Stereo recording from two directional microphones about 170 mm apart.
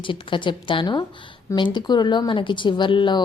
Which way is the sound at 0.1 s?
30° left (ahead or behind).